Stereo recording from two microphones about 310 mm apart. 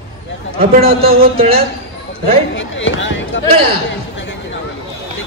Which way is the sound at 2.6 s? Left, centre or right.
Left.